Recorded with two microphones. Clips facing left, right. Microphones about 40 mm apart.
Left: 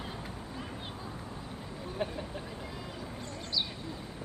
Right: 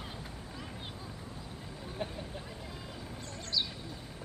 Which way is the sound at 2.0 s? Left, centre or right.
Left.